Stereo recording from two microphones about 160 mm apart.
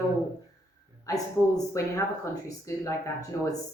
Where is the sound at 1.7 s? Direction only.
20° left (ahead or behind).